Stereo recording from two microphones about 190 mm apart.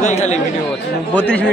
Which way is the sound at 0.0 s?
40° left (ahead or behind).